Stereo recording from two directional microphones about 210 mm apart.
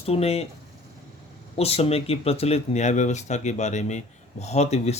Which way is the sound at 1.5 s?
30° left (ahead or behind).